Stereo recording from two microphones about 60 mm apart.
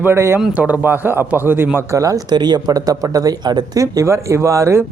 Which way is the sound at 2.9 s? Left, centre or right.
Right.